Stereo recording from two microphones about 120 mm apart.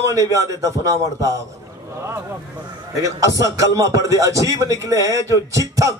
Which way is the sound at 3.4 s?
25° right (ahead or behind).